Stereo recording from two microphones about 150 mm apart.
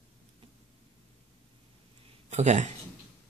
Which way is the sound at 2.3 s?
50° right (ahead or behind).